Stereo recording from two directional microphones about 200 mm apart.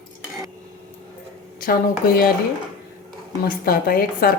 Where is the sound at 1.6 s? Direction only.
45° left (ahead or behind).